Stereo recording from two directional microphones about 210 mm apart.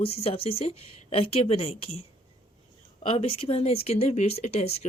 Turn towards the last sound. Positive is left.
turn(degrees=30)  # may be behind; listen again after turning